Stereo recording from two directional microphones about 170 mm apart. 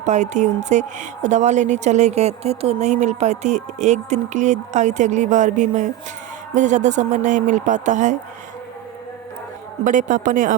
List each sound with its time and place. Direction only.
0.0 s speech: 45° right (ahead or behind)
9.8 s speech: 50° right (ahead or behind)